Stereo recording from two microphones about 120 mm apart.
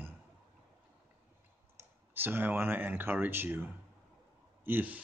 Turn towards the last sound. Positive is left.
turn(degrees=-15)  # may be behind; listen again after turning